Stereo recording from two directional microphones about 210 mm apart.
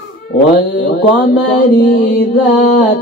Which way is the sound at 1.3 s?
45° left (ahead or behind).